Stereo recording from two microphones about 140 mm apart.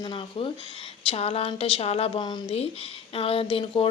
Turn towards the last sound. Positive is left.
turn(degrees=40)  # may be behind; listen again after turning